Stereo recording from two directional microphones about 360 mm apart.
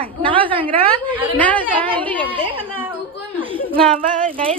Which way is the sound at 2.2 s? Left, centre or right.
Centre.